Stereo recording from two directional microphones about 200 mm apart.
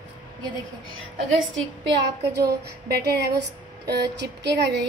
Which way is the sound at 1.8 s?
55° right (ahead or behind).